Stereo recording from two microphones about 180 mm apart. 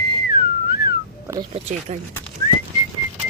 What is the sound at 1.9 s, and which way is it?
Speech, 40° right (ahead or behind).